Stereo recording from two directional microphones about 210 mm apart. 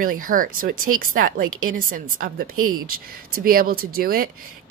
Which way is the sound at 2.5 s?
90° right.